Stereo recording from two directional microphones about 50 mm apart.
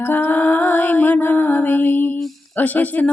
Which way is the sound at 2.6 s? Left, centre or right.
Left.